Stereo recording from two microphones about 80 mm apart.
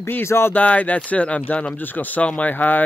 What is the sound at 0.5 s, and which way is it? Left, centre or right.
Speech, centre.